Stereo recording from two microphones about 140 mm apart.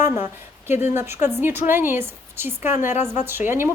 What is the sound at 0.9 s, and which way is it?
A woman's voice, 15° right (ahead or behind).